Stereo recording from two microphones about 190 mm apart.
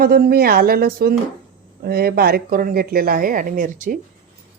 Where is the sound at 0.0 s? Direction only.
55° right (ahead or behind).